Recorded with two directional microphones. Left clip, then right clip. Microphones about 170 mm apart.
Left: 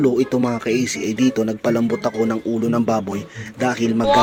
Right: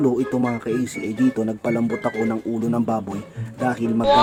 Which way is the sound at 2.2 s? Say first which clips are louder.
Left 3 dB; 10° left (ahead or behind).